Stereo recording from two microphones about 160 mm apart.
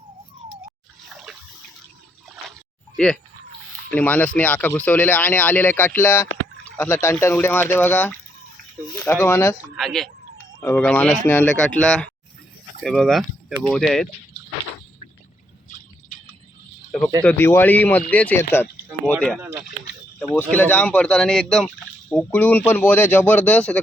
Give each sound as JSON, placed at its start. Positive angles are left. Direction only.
{"t": 1.1, "sound": "water", "side_deg": 0}
{"t": 3.0, "sound": "speech", "side_deg": 5}
{"t": 9.7, "sound": "speech", "side_deg": 0}
{"t": 17.2, "sound": "speech", "side_deg": 10}
{"t": 20.1, "sound": "speech", "side_deg": 10}